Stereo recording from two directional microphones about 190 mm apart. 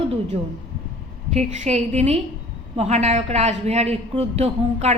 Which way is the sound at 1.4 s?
35° right (ahead or behind).